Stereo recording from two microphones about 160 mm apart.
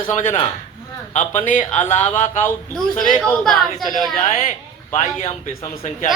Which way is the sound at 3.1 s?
5° left (ahead or behind).